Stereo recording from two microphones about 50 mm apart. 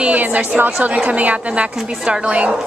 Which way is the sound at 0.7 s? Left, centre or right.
Right.